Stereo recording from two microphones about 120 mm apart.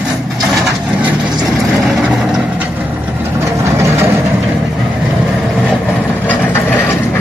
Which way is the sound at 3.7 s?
20° right (ahead or behind).